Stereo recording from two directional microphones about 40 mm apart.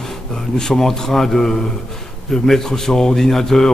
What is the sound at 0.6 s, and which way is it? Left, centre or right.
Speech, centre.